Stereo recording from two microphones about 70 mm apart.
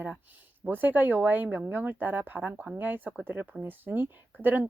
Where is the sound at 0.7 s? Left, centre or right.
Right.